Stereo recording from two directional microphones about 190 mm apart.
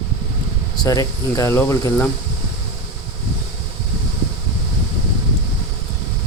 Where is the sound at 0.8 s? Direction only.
20° left (ahead or behind).